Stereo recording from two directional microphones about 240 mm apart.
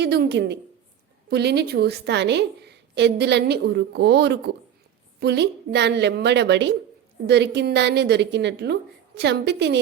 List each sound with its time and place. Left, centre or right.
0.0 s a woman's voice: right